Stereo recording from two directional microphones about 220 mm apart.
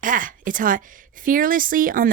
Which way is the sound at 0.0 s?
35° right (ahead or behind).